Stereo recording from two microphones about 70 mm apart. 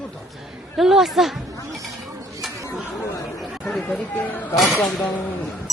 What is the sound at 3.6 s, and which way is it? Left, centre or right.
Speech, centre.